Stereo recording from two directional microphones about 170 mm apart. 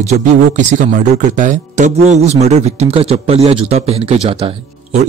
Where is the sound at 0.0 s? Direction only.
40° right (ahead or behind).